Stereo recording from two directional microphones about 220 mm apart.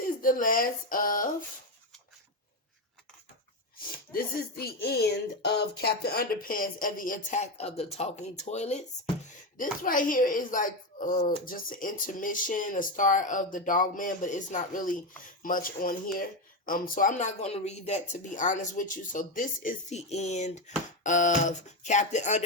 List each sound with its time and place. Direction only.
0.0 s speech: 40° left (ahead or behind)
3.9 s speech: 45° left (ahead or behind)
9.8 s speech: 40° left (ahead or behind)